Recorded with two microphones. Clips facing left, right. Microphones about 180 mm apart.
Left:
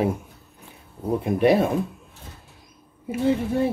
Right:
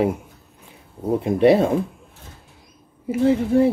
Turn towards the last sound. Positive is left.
turn(degrees=-25)  # may be behind; listen again after turning